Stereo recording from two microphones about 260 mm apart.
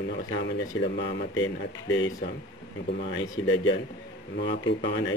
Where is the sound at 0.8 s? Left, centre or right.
Left.